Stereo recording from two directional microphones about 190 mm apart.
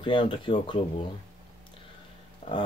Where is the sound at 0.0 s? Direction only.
25° left (ahead or behind).